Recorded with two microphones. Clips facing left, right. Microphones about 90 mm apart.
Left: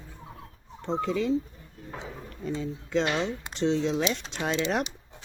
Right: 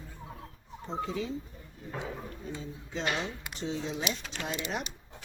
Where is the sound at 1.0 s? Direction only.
75° left (ahead or behind).